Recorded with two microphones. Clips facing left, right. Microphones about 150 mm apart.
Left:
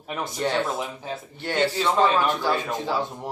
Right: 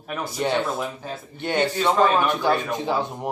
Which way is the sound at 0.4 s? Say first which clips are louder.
Right 2 dB; 15° right (ahead or behind).